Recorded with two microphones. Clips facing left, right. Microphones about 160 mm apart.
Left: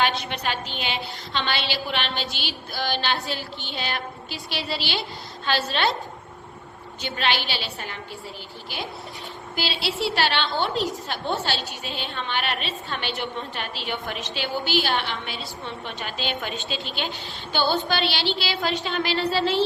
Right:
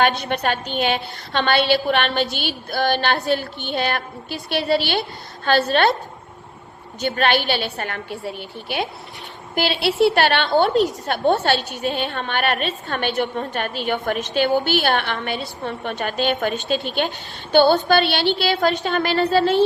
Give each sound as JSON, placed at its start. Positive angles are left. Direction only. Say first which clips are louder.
{"t": 0.3, "sound": "a woman's voice", "louder": "right 6 dB", "side_deg": -50}
{"t": 7.0, "sound": "a woman's voice", "louder": "right 7 dB", "side_deg": -50}